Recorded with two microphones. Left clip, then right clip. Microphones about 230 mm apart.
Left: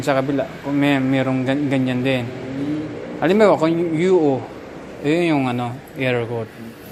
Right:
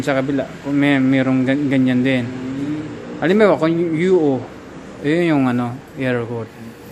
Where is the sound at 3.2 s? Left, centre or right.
Centre.